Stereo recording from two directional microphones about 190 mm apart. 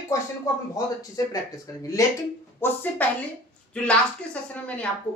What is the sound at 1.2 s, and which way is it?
Speech, 20° left (ahead or behind).